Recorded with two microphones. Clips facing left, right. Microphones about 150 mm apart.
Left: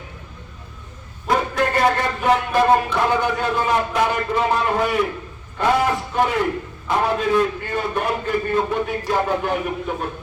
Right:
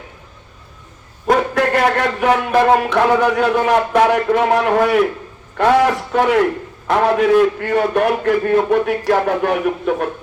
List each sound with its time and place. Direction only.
1.5 s speech: 70° right (ahead or behind)